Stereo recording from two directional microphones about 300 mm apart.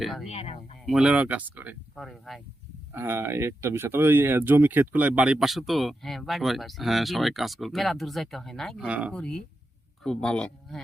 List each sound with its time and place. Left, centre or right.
0.0 s speech: centre
0.3 s speech: left
0.9 s speech: centre